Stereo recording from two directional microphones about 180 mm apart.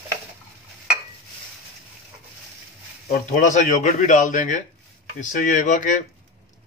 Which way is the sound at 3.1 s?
45° left (ahead or behind).